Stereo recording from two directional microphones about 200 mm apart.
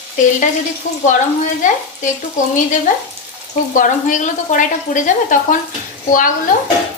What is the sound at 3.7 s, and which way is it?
Speech, 40° left (ahead or behind).